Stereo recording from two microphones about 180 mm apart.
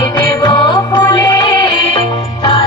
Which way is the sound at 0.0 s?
25° left (ahead or behind).